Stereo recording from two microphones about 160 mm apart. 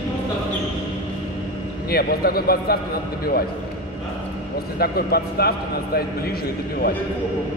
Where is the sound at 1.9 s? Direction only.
70° left (ahead or behind).